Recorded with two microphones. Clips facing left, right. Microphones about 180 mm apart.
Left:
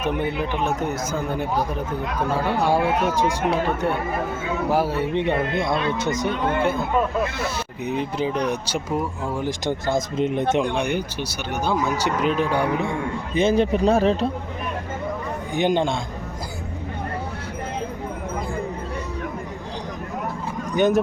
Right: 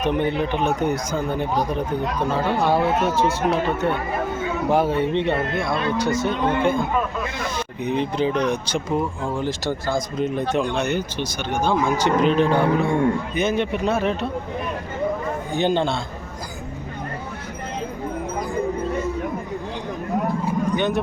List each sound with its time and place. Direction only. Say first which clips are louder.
0.0 s speech: right 3 dB; 5° left (ahead or behind)
6.6 s speech: right 1 dB; 5° left (ahead or behind)
13.3 s speech: left 3 dB; 30° left (ahead or behind)
15.5 s speech: even; 15° left (ahead or behind)
20.7 s speech: left 7 dB; 45° left (ahead or behind)